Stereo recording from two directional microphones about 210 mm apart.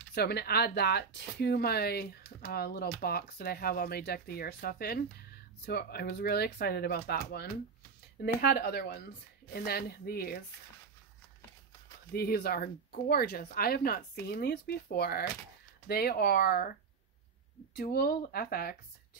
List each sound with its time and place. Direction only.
0.1 s speech: 50° left (ahead or behind)
12.1 s speech: 50° left (ahead or behind)
17.7 s speech: 45° left (ahead or behind)